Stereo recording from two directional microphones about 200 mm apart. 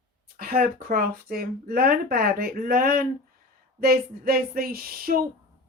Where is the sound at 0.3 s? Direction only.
50° right (ahead or behind).